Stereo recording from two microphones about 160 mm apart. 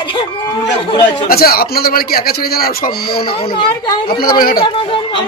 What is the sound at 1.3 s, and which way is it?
A man's voice, 70° left (ahead or behind).